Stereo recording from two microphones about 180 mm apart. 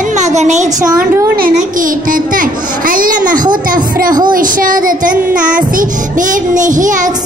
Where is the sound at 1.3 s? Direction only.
50° right (ahead or behind).